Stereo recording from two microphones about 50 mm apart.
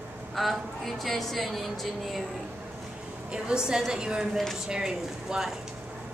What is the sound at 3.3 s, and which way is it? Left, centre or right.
A woman's voice, centre.